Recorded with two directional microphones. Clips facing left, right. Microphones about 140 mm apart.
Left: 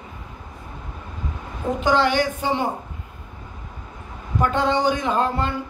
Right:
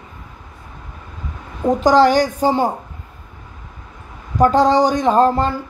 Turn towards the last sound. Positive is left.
turn(degrees=-40)  # may be behind; listen again after turning